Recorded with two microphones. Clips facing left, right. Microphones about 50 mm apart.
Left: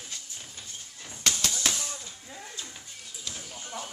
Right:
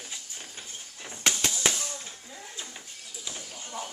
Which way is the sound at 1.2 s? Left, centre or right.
Right.